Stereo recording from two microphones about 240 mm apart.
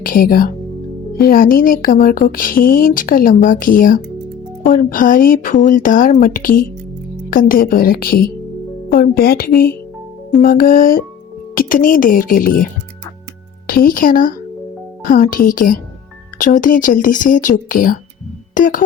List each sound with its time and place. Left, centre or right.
0.0 s speech: left